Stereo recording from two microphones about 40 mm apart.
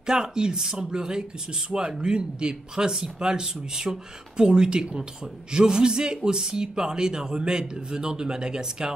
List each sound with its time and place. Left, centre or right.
0.0 s speech: centre